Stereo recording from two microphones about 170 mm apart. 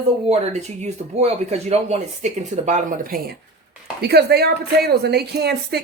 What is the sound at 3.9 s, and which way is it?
A woman's voice, 70° right (ahead or behind).